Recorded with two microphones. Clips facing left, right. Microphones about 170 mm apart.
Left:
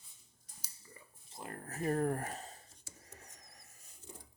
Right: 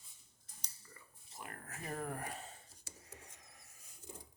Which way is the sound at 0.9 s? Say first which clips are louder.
Left 3 dB; 30° left (ahead or behind).